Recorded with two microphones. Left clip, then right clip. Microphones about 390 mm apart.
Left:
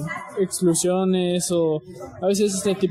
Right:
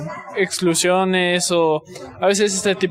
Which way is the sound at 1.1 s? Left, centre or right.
Right.